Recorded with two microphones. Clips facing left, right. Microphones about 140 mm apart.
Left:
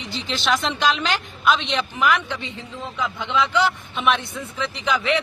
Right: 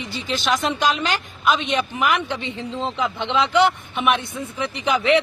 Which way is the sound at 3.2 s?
65° right (ahead or behind).